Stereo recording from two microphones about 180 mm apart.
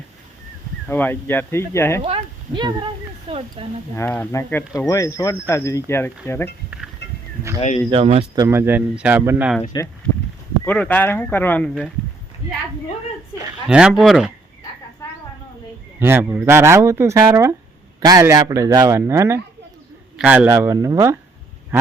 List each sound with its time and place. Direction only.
0.9 s speech: 10° left (ahead or behind)
2.0 s speech: 30° right (ahead or behind)
3.9 s speech: 10° left (ahead or behind)
6.7 s a sound: centre (ahead or behind)
7.9 s speech: 30° right (ahead or behind)
8.4 s speech: 15° right (ahead or behind)
9.6 s speech: 15° left (ahead or behind)
13.7 s speech: 5° right (ahead or behind)
16.0 s speech: 10° right (ahead or behind)
21.7 s a sound: 10° right (ahead or behind)